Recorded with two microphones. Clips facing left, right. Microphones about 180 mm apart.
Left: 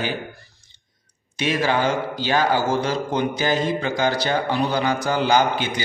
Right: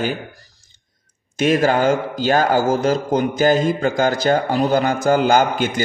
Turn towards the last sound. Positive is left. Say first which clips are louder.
# right 3 dB
turn(degrees=-45)  # may be behind; listen again after turning